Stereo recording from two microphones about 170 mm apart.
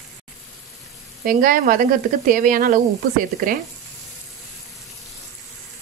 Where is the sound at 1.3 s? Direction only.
55° right (ahead or behind).